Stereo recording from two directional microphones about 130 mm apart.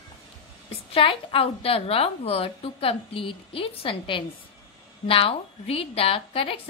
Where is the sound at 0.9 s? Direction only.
45° left (ahead or behind).